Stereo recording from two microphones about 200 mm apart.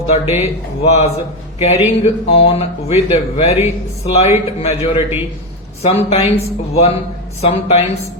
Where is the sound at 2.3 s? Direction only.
30° left (ahead or behind).